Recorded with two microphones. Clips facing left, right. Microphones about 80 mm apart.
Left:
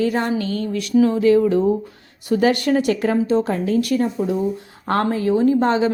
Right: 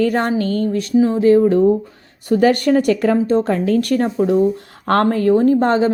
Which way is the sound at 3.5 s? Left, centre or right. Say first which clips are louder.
Right 3 dB; right.